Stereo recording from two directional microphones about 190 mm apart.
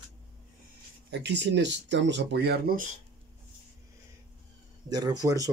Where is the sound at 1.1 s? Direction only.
65° right (ahead or behind).